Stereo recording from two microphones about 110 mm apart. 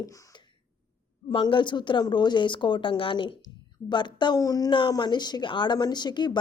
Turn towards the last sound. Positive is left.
turn(degrees=40)  # may be behind; listen again after turning